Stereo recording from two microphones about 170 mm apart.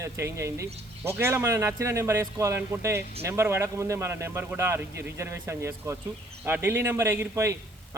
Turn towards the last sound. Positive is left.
turn(degrees=-15)  # may be behind; listen again after turning